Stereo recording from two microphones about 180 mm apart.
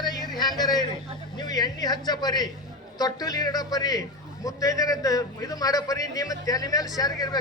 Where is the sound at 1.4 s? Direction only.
20° left (ahead or behind).